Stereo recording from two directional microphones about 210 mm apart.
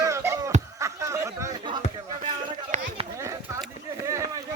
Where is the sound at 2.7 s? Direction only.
35° right (ahead or behind).